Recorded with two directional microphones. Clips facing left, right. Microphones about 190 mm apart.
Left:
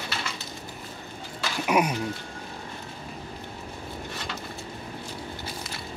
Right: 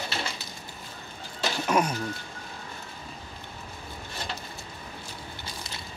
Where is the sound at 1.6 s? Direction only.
15° left (ahead or behind).